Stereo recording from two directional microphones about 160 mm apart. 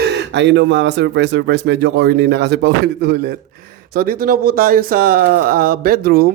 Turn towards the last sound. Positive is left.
turn(degrees=-70)  # may be behind; listen again after turning